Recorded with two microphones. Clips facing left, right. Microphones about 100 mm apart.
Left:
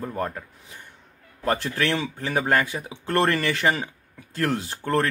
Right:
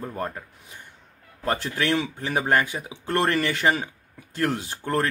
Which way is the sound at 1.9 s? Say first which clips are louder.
Right 1 dB; 20° right (ahead or behind).